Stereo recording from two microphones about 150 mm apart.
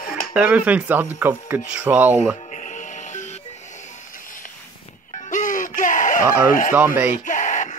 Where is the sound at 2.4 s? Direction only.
55° left (ahead or behind).